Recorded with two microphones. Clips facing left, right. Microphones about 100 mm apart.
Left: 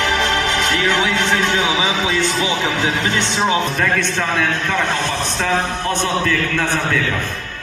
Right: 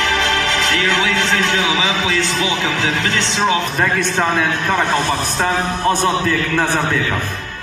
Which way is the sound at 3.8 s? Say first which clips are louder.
Right 2 dB; 5° right (ahead or behind).